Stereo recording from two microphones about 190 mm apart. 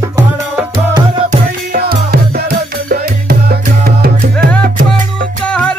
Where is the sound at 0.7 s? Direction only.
25° right (ahead or behind).